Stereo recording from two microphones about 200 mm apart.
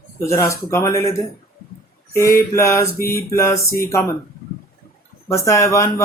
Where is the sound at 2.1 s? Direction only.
15° left (ahead or behind).